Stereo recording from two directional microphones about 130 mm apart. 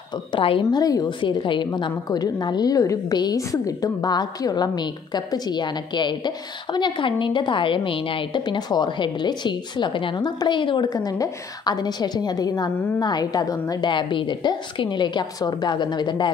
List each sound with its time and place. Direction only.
0.3 s a woman's voice: 45° left (ahead or behind)